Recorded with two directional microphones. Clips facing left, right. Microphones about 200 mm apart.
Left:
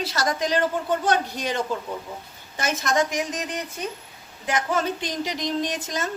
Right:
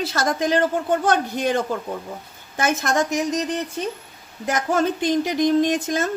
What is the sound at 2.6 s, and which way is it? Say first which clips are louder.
Speech: right 2 dB; 50° right (ahead or behind).